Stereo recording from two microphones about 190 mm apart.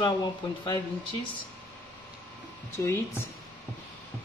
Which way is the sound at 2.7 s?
15° left (ahead or behind).